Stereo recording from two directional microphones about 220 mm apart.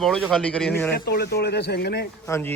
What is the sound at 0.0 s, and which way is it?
Speech, centre (ahead or behind).